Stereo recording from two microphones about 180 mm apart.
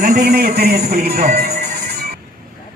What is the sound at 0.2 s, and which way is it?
A man's voice, 60° right (ahead or behind).